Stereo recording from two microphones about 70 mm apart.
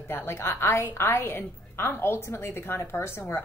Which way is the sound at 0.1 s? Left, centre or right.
Left.